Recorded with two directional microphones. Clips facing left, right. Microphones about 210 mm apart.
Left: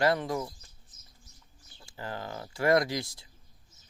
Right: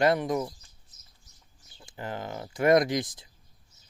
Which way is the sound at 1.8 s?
20° right (ahead or behind).